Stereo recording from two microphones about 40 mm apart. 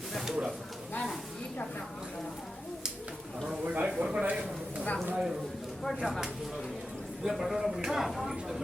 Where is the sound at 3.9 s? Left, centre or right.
Right.